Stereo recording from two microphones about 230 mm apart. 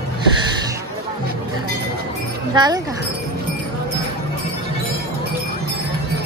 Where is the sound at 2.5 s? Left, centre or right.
Centre.